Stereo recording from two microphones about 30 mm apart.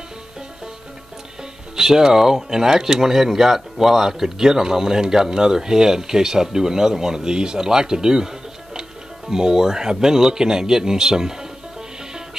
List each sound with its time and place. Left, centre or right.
1.8 s speech: centre